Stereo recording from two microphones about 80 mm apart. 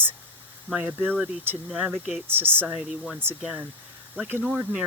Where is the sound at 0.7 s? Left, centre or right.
Right.